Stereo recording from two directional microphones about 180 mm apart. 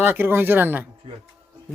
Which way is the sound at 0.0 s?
10° right (ahead or behind).